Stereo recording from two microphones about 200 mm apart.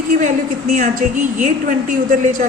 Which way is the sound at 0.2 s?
35° right (ahead or behind).